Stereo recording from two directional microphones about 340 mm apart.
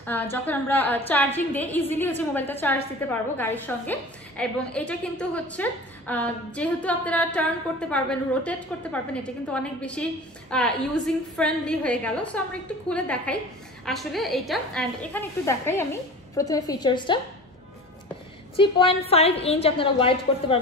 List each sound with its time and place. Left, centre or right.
0.0 s a woman's voice: centre
18.6 s a woman's voice: centre